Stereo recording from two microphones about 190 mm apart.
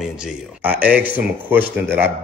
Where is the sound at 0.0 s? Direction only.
5° right (ahead or behind).